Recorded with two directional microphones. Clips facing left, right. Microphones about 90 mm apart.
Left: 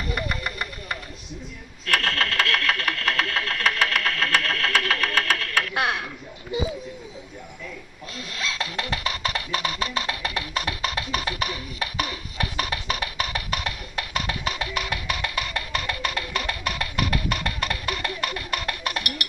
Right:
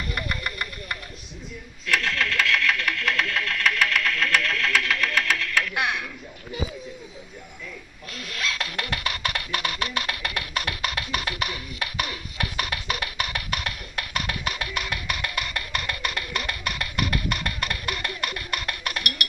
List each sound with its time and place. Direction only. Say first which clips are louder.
0.1 s engine: left 3 dB; 25° left (ahead or behind)
2.3 s engine: even; 40° left (ahead or behind)
8.1 s music: right 1 dB; 30° left (ahead or behind)